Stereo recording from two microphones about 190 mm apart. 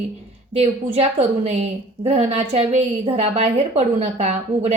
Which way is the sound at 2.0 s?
35° right (ahead or behind).